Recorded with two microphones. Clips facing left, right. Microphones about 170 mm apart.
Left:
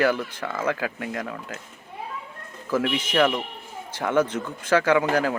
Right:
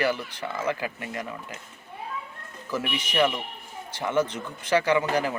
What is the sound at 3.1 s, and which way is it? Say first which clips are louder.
Speech: left 2 dB; 55° left (ahead or behind).